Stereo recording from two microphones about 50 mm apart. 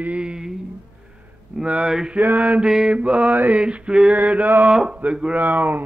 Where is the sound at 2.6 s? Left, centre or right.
Centre.